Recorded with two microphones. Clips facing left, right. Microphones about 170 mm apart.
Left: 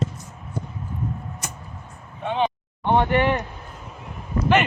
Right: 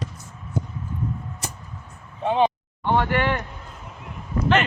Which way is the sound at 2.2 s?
35° right (ahead or behind).